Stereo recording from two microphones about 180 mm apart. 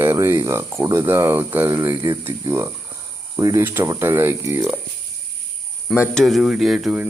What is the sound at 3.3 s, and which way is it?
Speech, 15° right (ahead or behind).